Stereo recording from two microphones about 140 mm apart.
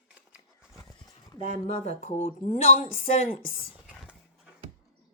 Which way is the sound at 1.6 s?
50° left (ahead or behind).